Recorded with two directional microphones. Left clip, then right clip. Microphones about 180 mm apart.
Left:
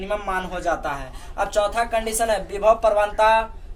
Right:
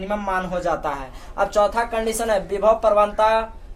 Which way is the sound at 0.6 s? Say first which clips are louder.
Right 1 dB; 35° right (ahead or behind).